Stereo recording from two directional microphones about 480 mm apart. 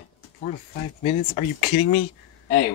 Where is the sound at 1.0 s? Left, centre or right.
Centre.